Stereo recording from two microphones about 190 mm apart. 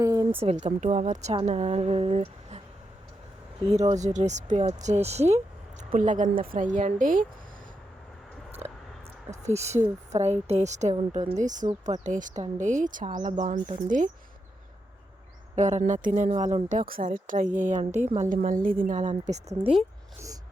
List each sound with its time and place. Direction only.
0.0 s a sound: 20° right (ahead or behind)
0.4 s speech: 35° right (ahead or behind)
3.7 s a woman's voice: 35° right (ahead or behind)
9.4 s a woman's voice: 35° right (ahead or behind)
15.5 s a woman's voice: 40° right (ahead or behind)
20.1 s a sound: 15° right (ahead or behind)